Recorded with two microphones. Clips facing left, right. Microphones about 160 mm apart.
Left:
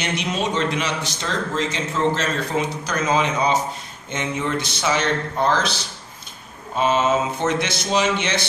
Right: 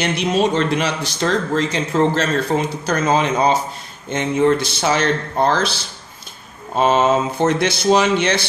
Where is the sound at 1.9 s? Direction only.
40° right (ahead or behind).